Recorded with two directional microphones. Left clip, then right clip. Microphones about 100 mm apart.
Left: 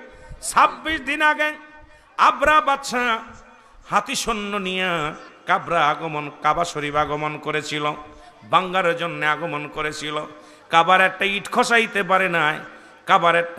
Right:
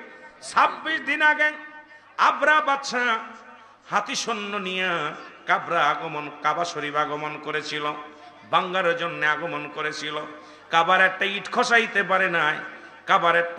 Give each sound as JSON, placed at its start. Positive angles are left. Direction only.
{"t": 0.4, "sound": "a man's voice", "side_deg": 50}